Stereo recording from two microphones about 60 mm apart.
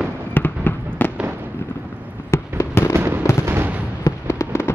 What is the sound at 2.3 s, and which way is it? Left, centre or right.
Fireworks, left.